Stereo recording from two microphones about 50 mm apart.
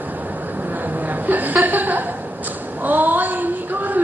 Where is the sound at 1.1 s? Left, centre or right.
Right.